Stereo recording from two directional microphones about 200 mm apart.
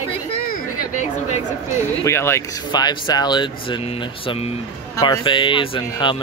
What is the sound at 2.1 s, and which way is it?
Speech, 10° left (ahead or behind).